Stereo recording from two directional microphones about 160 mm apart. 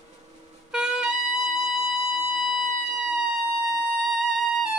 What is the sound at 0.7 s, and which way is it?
Music, 5° right (ahead or behind).